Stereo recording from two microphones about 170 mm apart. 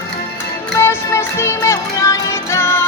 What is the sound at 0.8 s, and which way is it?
Music, 15° left (ahead or behind).